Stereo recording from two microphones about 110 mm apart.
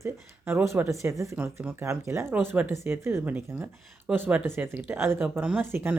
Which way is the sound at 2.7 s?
25° right (ahead or behind).